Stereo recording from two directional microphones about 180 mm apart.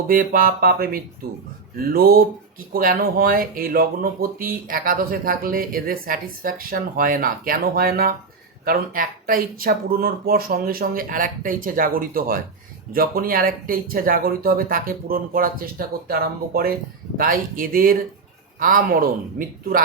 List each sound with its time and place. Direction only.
0.1 s speech: 50° right (ahead or behind)